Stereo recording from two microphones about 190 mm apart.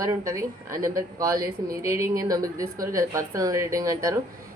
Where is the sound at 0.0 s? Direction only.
15° right (ahead or behind).